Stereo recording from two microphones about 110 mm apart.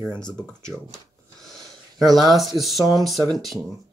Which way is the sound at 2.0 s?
Centre (ahead or behind).